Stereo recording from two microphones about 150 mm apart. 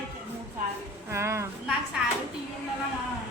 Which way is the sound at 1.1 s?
20° right (ahead or behind).